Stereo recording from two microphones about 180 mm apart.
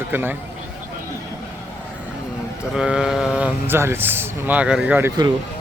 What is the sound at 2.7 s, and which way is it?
Speech, 5° right (ahead or behind).